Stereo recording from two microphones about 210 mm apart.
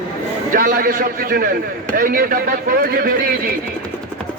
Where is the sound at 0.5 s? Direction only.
40° right (ahead or behind).